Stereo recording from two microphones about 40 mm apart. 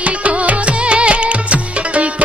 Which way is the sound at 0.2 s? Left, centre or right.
Right.